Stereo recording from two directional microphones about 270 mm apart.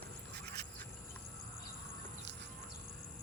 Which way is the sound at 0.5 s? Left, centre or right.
Right.